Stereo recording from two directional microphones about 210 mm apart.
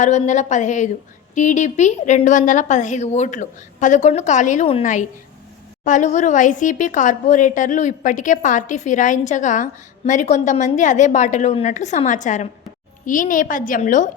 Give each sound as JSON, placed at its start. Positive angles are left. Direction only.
{"t": 0.0, "sound": "speech", "side_deg": 35}